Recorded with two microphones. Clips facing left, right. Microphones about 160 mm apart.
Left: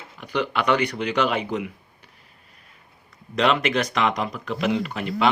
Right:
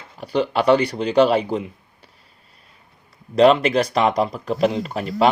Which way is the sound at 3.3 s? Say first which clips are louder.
Right 7 dB; 35° right (ahead or behind).